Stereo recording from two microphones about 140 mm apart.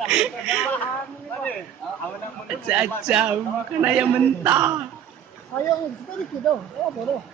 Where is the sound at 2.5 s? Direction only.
10° right (ahead or behind).